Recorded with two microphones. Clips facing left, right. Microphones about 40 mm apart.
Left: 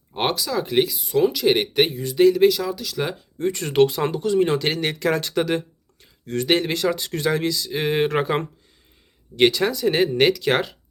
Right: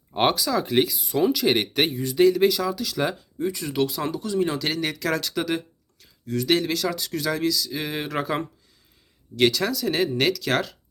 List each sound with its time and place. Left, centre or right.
0.1 s speech: centre
3.4 s speech: left